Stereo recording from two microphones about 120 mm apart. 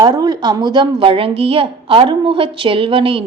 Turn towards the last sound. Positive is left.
turn(degrees=-50)  # may be behind; listen again after turning